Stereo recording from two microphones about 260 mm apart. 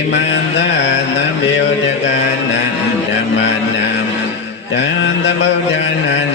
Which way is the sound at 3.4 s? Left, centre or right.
Left.